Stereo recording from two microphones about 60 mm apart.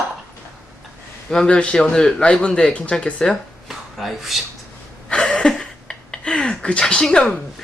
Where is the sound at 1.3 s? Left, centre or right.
Centre.